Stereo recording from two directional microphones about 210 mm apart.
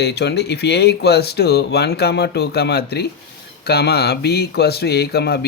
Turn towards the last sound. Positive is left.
turn(degrees=50)  # may be behind; listen again after turning